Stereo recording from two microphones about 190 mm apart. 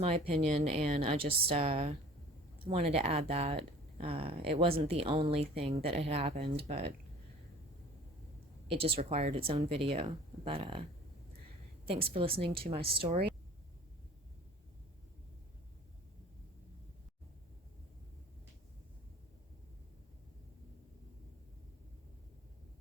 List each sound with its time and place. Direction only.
0.0 s speech: 30° right (ahead or behind)
8.8 s speech: 35° right (ahead or behind)
11.9 s speech: 30° right (ahead or behind)